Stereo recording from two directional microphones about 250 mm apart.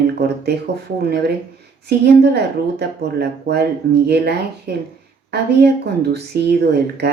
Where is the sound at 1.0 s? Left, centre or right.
Right.